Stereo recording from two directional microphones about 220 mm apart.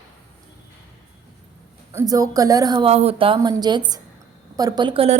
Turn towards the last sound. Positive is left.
turn(degrees=-25)  # may be behind; listen again after turning